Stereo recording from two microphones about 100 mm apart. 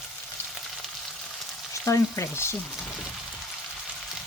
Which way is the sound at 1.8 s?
25° left (ahead or behind).